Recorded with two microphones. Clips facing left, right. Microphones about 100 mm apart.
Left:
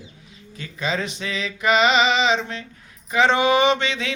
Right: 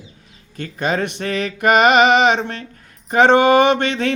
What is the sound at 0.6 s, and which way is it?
Speech, 55° right (ahead or behind).